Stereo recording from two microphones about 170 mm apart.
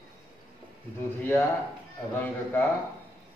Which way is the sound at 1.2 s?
10° left (ahead or behind).